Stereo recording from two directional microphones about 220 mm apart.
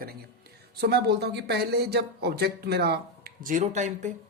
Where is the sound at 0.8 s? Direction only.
50° right (ahead or behind).